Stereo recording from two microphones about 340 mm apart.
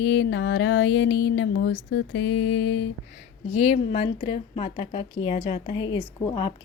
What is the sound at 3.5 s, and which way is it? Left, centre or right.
Speech, centre.